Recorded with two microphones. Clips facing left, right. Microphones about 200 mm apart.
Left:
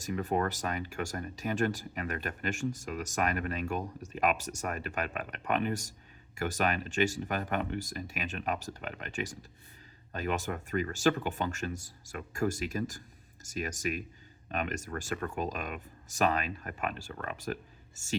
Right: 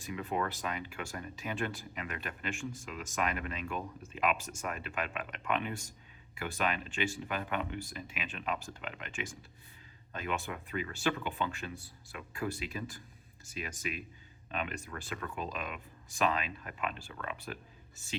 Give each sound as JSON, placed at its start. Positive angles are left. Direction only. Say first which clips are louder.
{"t": 0.0, "sound": "speech", "louder": "left 4 dB", "side_deg": 45}